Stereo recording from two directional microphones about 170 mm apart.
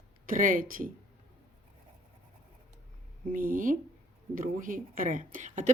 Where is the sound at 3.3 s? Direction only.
55° right (ahead or behind).